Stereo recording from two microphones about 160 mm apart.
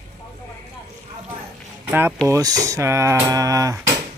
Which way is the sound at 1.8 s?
15° right (ahead or behind).